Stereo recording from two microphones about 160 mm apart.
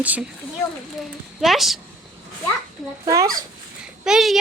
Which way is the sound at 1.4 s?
Centre (ahead or behind).